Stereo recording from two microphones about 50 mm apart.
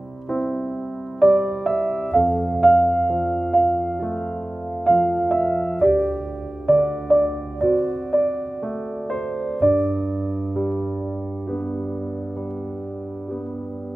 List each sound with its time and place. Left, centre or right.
0.3 s music: centre
10.6 s music: left